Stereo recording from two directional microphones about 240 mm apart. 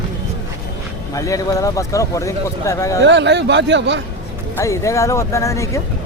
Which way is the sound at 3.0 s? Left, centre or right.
Right.